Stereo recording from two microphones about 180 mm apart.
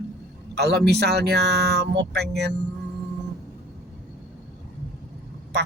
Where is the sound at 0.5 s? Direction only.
65° right (ahead or behind).